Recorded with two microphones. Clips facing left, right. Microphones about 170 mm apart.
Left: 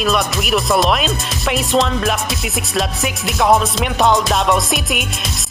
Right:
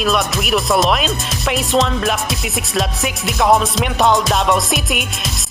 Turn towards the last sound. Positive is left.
turn(degrees=0)  # may be behind; listen again after turning